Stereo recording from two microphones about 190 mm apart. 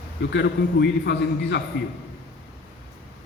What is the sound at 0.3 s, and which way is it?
A man's voice, 65° left (ahead or behind).